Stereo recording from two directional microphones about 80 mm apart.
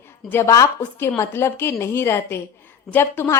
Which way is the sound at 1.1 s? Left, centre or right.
Left.